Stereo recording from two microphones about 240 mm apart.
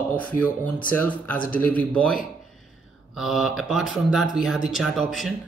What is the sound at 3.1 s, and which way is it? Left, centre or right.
Speech, centre.